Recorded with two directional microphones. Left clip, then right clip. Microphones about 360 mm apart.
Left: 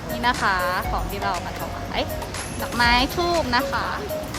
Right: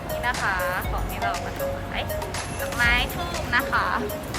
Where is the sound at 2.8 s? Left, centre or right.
Centre.